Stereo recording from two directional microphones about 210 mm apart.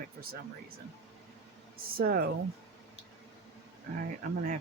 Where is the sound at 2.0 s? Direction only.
45° right (ahead or behind).